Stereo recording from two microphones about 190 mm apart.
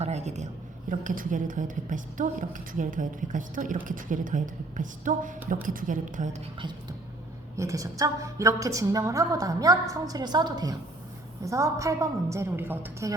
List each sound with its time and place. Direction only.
0.0 s a sound: 35° right (ahead or behind)
0.9 s a woman's voice: 45° right (ahead or behind)
7.5 s a woman's voice: 15° right (ahead or behind)